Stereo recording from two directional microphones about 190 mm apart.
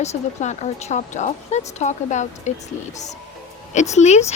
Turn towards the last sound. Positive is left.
turn(degrees=35)  # may be behind; listen again after turning